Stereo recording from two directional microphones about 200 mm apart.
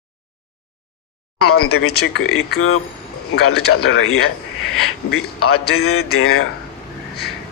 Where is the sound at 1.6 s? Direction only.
90° left.